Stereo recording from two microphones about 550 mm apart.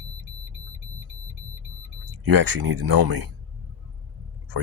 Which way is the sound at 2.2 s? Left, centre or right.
Right.